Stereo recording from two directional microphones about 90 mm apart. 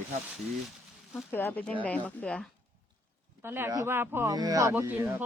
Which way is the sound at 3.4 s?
25° right (ahead or behind).